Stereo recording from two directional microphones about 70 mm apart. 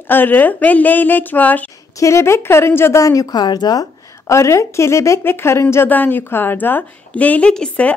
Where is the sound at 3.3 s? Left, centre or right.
Left.